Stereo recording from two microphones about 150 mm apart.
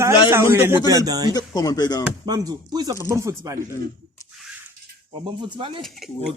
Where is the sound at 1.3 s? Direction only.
25° left (ahead or behind).